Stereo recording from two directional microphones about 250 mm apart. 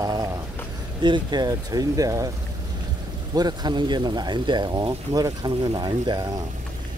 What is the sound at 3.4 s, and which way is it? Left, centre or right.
Speech, centre.